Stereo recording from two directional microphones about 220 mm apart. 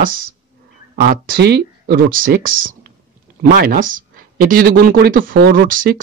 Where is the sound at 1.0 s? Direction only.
45° right (ahead or behind).